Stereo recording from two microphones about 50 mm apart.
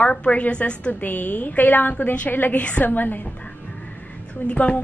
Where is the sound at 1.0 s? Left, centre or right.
Left.